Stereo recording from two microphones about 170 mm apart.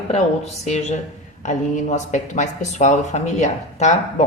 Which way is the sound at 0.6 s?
40° left (ahead or behind).